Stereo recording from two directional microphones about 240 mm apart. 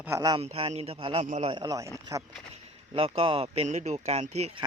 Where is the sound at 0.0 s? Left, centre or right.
Centre.